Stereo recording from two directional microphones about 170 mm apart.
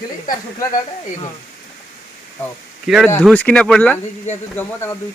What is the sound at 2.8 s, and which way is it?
Speech, centre (ahead or behind).